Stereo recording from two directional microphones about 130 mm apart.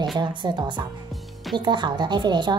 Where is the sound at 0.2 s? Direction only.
35° right (ahead or behind).